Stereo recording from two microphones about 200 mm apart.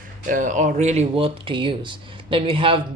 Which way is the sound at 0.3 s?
40° right (ahead or behind).